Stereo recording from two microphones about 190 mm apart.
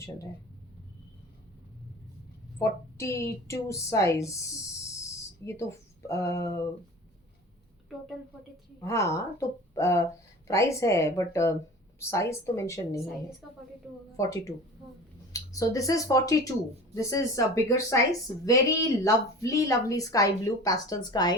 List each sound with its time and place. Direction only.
2.6 s a woman's voice: 15° left (ahead or behind)
5.4 s a woman's voice: 15° left (ahead or behind)
8.8 s a woman's voice: 15° left (ahead or behind)
14.2 s a woman's voice: 15° left (ahead or behind)